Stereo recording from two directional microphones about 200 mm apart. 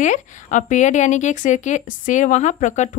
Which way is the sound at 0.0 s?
40° left (ahead or behind).